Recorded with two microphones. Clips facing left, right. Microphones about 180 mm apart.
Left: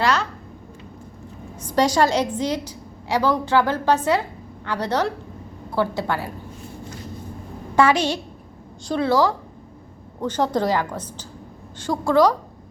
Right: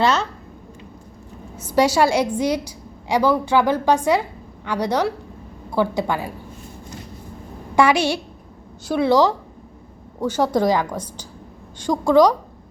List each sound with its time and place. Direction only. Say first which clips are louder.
0.0 s speech: right 2 dB; 25° right (ahead or behind)
1.5 s a woman's voice: right 2 dB; 10° right (ahead or behind)
7.8 s a woman's voice: right 1 dB; 10° right (ahead or behind)